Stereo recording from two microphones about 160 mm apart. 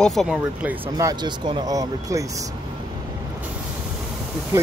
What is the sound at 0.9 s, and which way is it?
Speech, 25° right (ahead or behind).